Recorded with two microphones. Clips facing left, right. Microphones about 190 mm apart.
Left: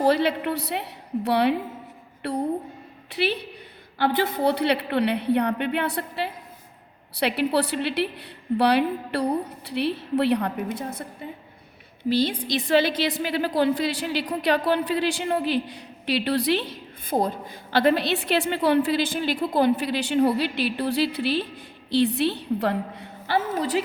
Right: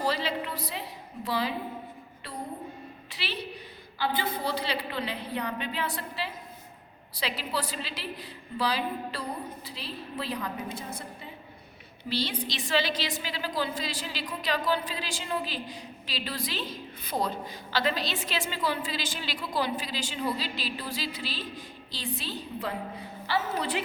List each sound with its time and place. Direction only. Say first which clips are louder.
0.0 s a woman's voice: left 9 dB; 60° left (ahead or behind)
3.1 s a woman's voice: left 11 dB; 55° left (ahead or behind)
12.0 s a woman's voice: left 9 dB; 50° left (ahead or behind)